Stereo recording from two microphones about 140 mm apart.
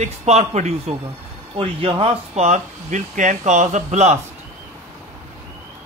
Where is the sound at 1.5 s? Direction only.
40° right (ahead or behind).